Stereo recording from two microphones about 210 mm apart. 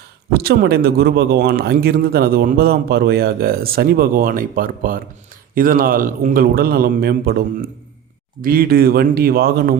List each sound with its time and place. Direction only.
0.3 s speech: 45° right (ahead or behind)